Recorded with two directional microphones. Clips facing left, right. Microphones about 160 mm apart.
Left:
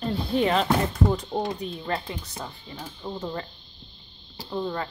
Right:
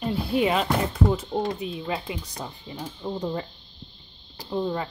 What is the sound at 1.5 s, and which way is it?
Speech, 5° right (ahead or behind).